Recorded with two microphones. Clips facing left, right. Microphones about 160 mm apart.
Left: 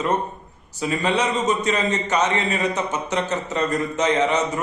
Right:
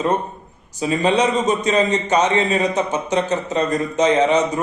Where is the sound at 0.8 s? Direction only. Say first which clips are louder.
Right 4 dB; 25° right (ahead or behind).